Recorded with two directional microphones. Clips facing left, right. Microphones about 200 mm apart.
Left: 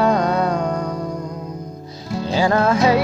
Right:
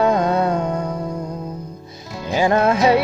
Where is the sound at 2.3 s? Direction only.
20° right (ahead or behind).